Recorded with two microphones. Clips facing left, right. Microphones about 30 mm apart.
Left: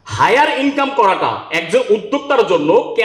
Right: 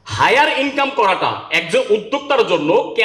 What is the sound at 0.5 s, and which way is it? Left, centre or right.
Speech, right.